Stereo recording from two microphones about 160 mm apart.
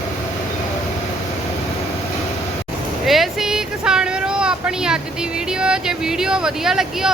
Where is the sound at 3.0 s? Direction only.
Centre (ahead or behind).